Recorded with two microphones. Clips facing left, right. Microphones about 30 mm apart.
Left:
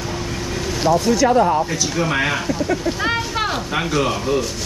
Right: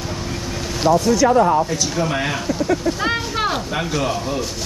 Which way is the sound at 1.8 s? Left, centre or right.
Centre.